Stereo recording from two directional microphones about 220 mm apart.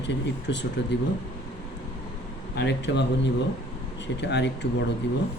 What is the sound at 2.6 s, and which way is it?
Speech, 50° left (ahead or behind).